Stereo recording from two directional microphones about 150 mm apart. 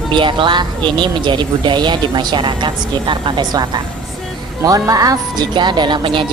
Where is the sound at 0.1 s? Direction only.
35° right (ahead or behind).